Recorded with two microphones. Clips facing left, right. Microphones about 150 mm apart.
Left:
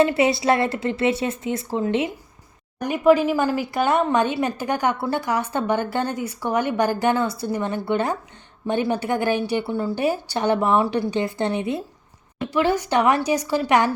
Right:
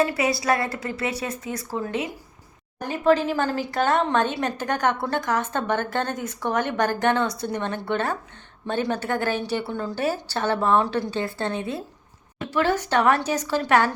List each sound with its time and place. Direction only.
0.0 s a woman's voice: 25° left (ahead or behind)
2.8 s speech: 15° left (ahead or behind)